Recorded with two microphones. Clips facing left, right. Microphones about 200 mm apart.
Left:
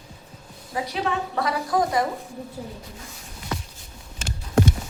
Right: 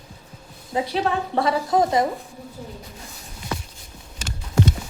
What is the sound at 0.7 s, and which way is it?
A woman's voice, 25° right (ahead or behind).